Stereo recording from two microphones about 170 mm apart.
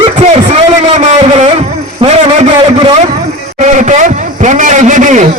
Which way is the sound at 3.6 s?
45° right (ahead or behind).